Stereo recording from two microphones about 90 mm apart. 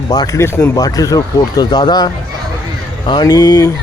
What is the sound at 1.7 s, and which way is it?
Speech, 60° left (ahead or behind).